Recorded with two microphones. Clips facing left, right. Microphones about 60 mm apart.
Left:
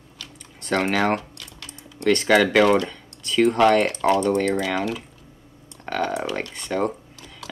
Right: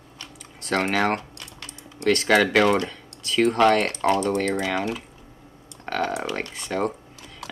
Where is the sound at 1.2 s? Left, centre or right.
Right.